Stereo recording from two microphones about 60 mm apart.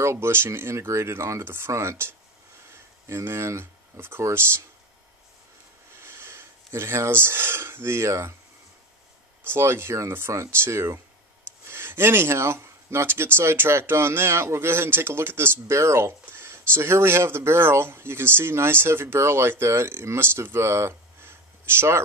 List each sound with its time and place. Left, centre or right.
0.0 s speech: right
5.9 s speech: right
9.5 s speech: right